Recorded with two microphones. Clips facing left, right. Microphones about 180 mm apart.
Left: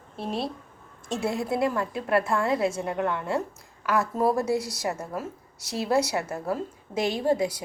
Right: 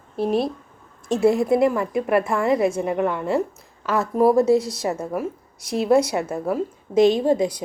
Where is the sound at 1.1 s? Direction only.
20° right (ahead or behind).